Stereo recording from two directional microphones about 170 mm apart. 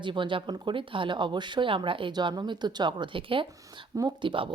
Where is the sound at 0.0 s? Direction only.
30° right (ahead or behind).